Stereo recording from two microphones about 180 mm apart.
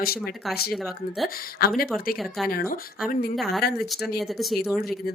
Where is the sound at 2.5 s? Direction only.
55° left (ahead or behind).